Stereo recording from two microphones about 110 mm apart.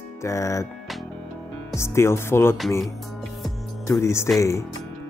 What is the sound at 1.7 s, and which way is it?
Speech, 25° left (ahead or behind).